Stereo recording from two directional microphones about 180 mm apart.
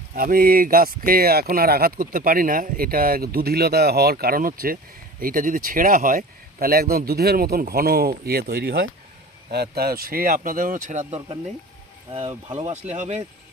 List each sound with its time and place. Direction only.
0.1 s speech: 55° right (ahead or behind)
12.5 s speech: 40° right (ahead or behind)